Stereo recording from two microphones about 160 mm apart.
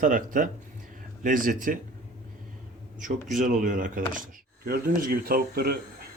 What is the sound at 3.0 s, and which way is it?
A man's voice, 55° right (ahead or behind).